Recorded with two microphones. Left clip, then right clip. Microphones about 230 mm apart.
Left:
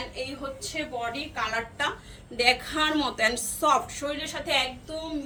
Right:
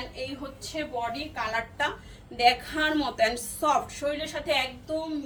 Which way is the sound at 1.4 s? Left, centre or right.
Centre.